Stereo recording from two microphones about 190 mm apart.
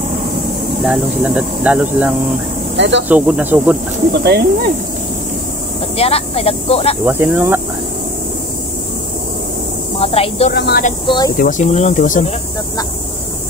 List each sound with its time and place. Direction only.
0.8 s speech: 5° right (ahead or behind)
4.1 s speech: 55° right (ahead or behind)
5.9 s speech: 30° left (ahead or behind)
7.1 s speech: 10° right (ahead or behind)
9.9 s speech: 30° left (ahead or behind)
10.5 s speech: 60° left (ahead or behind)
11.1 s speech: 20° left (ahead or behind)
11.3 s speech: 45° left (ahead or behind)